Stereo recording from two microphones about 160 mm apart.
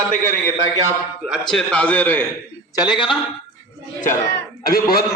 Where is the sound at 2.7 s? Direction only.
25° left (ahead or behind).